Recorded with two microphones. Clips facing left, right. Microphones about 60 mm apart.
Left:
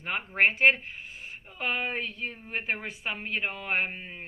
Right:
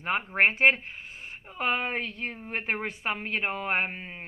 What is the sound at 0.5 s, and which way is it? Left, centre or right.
Speech, right.